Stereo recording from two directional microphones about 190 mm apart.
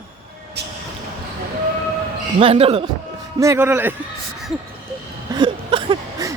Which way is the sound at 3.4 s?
15° right (ahead or behind).